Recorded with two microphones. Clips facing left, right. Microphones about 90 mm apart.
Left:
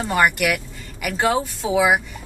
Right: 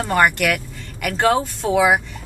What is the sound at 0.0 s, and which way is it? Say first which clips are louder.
Speech: right 2 dB; 5° left (ahead or behind).